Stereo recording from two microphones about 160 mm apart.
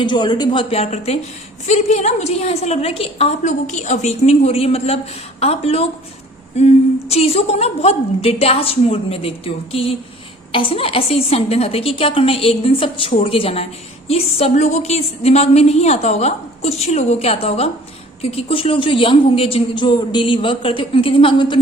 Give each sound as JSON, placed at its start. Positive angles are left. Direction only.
{"t": 0.0, "sound": "a woman's voice", "side_deg": 30}